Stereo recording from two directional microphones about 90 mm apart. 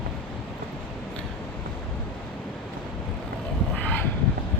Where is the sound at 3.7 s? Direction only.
15° left (ahead or behind).